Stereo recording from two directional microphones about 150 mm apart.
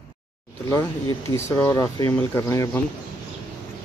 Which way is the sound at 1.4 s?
15° left (ahead or behind).